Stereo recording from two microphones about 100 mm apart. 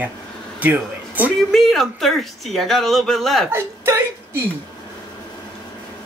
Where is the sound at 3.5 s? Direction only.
25° right (ahead or behind).